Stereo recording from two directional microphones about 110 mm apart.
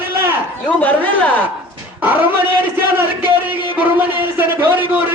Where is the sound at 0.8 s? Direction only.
15° left (ahead or behind).